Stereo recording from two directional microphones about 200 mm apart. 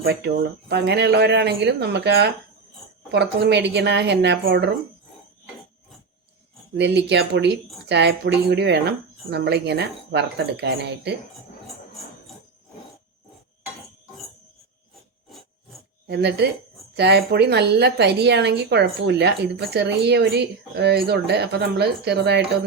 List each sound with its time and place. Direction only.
0.0 s a woman's voice: 55° right (ahead or behind)
6.7 s a woman's voice: 60° right (ahead or behind)
16.0 s a woman's voice: 55° right (ahead or behind)